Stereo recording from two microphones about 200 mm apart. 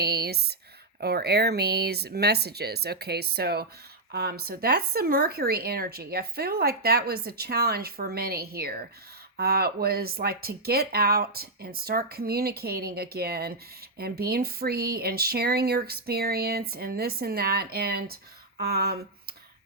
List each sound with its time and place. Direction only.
0.0 s speech: 55° right (ahead or behind)